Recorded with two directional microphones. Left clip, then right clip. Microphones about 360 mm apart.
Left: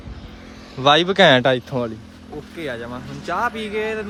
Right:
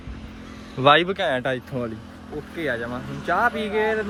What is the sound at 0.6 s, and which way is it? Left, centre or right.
Speech, centre.